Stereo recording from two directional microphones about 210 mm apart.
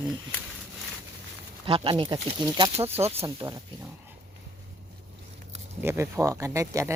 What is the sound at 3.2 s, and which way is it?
Speech, 15° right (ahead or behind).